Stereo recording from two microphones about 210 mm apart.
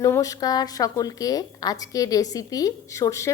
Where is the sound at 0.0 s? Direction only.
15° left (ahead or behind).